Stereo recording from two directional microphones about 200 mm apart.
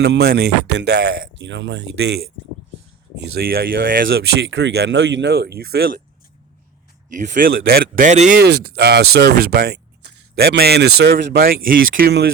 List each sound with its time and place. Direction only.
0.0 s speech: 55° right (ahead or behind)
3.2 s speech: 50° right (ahead or behind)
7.1 s speech: 40° right (ahead or behind)
8.4 s speech: 55° right (ahead or behind)